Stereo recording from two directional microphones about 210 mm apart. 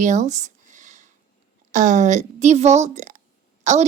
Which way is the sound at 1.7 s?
35° right (ahead or behind).